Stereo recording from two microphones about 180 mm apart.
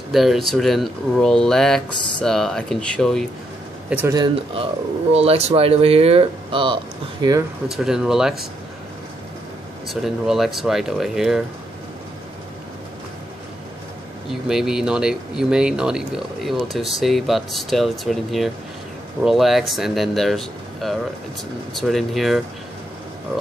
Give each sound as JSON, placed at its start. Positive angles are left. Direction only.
{"t": 0.1, "sound": "speech", "side_deg": 0}
{"t": 4.1, "sound": "speech", "side_deg": -25}
{"t": 5.1, "sound": "speech", "side_deg": -35}
{"t": 7.7, "sound": "speech", "side_deg": -5}
{"t": 9.8, "sound": "speech", "side_deg": 0}
{"t": 14.5, "sound": "speech", "side_deg": -5}